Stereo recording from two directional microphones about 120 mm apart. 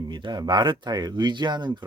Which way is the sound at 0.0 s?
40° right (ahead or behind).